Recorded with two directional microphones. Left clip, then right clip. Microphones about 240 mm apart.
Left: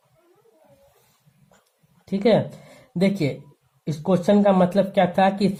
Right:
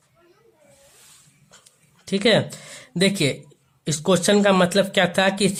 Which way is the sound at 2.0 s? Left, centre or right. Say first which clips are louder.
Right 1 dB; right.